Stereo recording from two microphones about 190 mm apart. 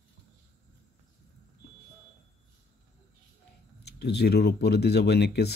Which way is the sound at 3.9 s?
60° left (ahead or behind).